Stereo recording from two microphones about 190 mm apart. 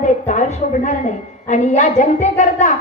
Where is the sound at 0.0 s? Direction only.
40° left (ahead or behind).